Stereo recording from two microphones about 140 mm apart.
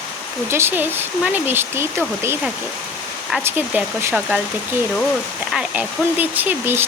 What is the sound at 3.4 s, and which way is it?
Speech, 10° right (ahead or behind).